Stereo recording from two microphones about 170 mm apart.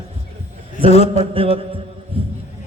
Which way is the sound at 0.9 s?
40° left (ahead or behind).